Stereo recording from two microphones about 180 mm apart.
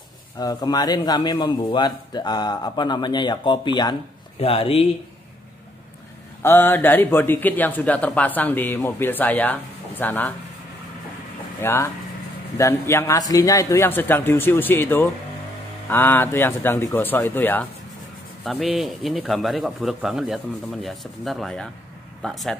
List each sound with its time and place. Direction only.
0.4 s a man's voice: 20° left (ahead or behind)
6.4 s a man's voice: 10° left (ahead or behind)
11.6 s a man's voice: 15° left (ahead or behind)
18.4 s a man's voice: centre (ahead or behind)